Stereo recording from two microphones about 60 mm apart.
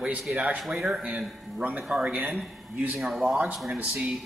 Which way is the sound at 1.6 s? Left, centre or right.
Right.